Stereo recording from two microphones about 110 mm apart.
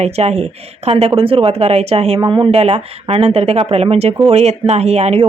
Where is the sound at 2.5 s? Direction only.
65° right (ahead or behind).